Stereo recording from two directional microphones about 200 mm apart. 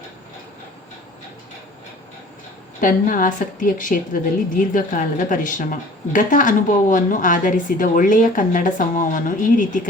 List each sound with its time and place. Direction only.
2.8 s a woman's voice: 40° left (ahead or behind)